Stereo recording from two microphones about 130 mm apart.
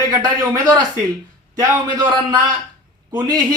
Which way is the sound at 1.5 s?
30° right (ahead or behind).